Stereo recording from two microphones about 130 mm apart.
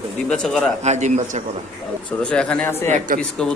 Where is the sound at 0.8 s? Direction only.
65° right (ahead or behind).